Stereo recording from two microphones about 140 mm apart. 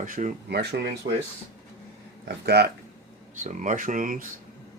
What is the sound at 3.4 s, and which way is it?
Speech, 65° right (ahead or behind).